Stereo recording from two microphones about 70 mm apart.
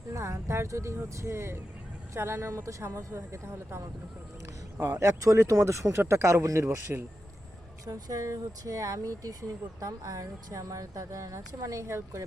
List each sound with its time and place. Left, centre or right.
0.1 s speech: right
4.9 s speech: right
7.9 s speech: right